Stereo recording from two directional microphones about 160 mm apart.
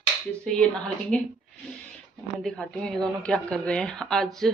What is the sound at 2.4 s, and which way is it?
A woman's voice, centre (ahead or behind).